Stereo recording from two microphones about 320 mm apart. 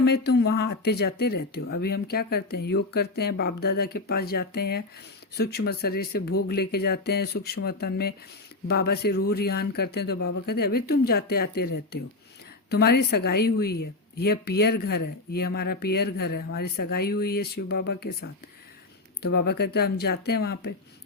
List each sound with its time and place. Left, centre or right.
0.3 s speech: left
12.7 s speech: left